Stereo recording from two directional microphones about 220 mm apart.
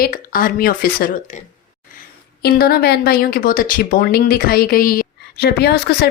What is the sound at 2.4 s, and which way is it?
Speech, 40° left (ahead or behind).